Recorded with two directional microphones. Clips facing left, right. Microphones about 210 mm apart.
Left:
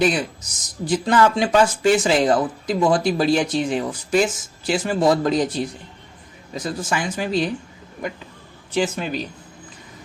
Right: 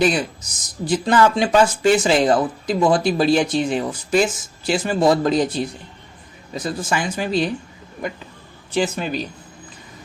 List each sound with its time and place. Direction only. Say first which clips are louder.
0.0 s speech: right 1 dB; 35° right (ahead or behind)
8.7 s speech: right 1 dB; 35° right (ahead or behind)